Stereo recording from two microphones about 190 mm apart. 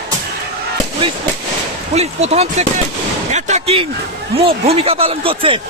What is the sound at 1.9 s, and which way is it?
Speech, 35° right (ahead or behind).